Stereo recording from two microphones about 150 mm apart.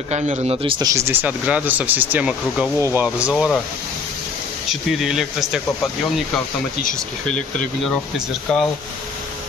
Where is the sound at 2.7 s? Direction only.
20° right (ahead or behind).